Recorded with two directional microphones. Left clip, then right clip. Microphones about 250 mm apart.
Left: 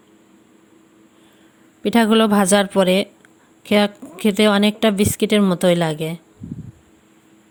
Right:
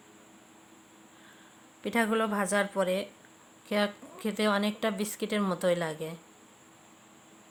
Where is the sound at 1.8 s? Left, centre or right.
Left.